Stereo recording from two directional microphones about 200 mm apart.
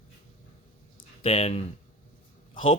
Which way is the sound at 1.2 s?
30° left (ahead or behind).